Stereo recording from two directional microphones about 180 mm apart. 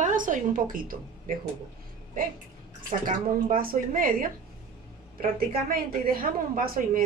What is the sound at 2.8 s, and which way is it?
A woman's voice, 50° right (ahead or behind).